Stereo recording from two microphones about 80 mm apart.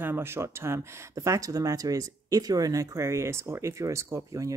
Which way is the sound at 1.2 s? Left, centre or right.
Right.